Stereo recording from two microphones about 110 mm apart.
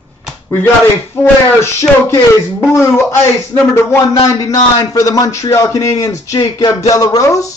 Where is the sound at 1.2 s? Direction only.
25° left (ahead or behind).